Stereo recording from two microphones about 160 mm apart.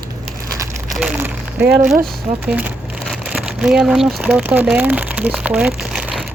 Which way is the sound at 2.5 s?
10° right (ahead or behind).